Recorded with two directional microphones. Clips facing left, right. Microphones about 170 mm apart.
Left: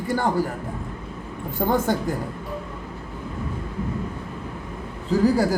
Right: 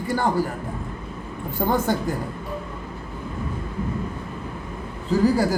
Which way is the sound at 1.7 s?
50° left (ahead or behind).